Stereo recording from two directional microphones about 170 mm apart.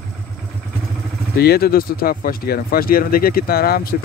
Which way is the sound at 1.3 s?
65° left (ahead or behind).